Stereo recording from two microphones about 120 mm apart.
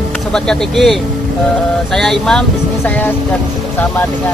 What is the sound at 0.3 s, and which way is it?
Speech, 5° left (ahead or behind).